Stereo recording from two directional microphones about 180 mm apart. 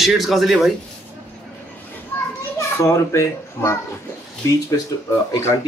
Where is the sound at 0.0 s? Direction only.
Centre (ahead or behind).